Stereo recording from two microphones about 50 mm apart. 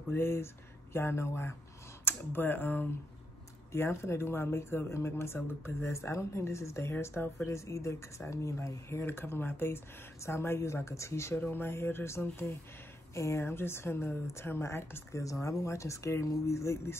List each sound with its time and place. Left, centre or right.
0.1 s speech: left
2.0 s speech: left
3.7 s speech: left
6.9 s speech: left
7.4 s speech: left
10.2 s speech: left
13.1 s speech: left